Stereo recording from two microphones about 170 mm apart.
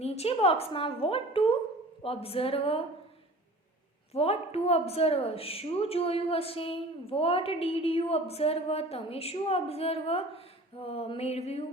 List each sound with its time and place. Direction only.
0.0 s a woman's voice: 35° left (ahead or behind)
4.1 s a woman's voice: 35° left (ahead or behind)